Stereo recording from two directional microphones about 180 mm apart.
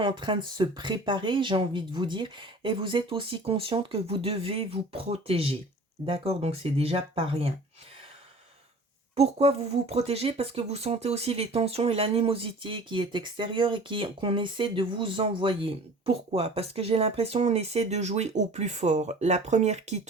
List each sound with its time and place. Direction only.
0.0 s speech: 25° right (ahead or behind)
9.1 s speech: 35° right (ahead or behind)